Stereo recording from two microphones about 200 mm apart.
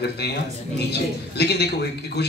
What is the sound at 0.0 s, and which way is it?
A man's voice, 55° left (ahead or behind).